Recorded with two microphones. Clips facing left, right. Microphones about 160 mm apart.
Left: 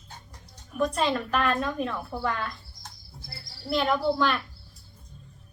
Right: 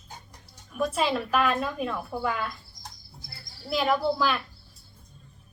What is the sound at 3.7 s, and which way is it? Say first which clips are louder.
Speech: even; 5° right (ahead or behind).